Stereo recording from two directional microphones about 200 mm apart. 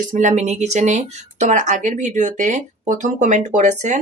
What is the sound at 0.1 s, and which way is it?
Speech, 35° right (ahead or behind).